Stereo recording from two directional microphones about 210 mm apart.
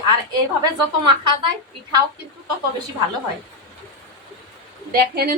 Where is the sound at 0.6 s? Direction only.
20° right (ahead or behind).